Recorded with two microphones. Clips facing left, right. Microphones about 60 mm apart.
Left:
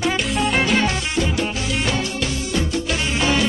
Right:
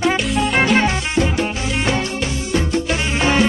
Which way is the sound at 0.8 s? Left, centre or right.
Right.